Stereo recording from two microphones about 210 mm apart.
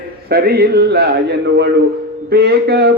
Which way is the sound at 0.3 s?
50° right (ahead or behind).